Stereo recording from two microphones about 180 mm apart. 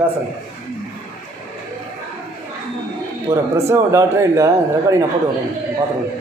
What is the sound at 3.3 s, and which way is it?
Speech, 15° right (ahead or behind).